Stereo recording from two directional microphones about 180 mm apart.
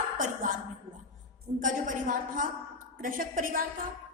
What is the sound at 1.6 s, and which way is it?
A woman's voice, 45° right (ahead or behind).